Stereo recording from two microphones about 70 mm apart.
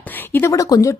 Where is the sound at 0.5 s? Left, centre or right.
Left.